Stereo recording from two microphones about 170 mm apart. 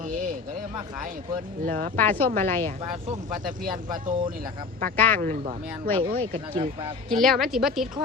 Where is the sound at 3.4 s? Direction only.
50° right (ahead or behind).